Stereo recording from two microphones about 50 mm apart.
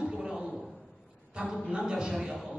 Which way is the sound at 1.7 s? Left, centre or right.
Centre.